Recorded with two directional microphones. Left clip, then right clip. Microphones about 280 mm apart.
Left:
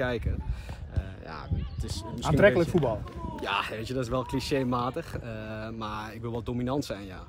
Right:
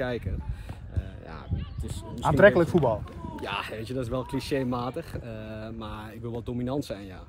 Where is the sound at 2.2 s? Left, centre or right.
Centre.